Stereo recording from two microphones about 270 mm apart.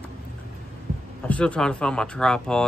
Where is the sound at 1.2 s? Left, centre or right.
Centre.